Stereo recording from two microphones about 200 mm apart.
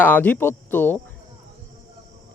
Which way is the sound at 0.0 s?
10° left (ahead or behind).